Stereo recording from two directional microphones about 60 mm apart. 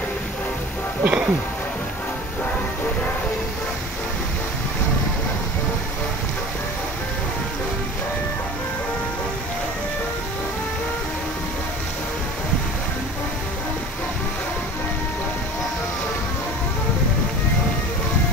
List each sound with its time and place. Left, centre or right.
1.0 s music: centre